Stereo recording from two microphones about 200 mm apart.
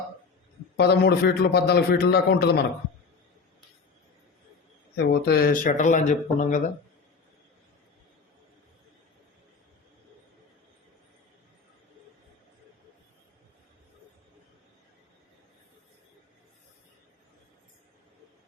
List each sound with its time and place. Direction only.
0.8 s a man's voice: 55° left (ahead or behind)
4.9 s speech: 55° left (ahead or behind); by 6.6 s 35° left (ahead or behind)